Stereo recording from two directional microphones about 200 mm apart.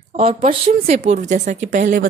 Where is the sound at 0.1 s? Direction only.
30° right (ahead or behind).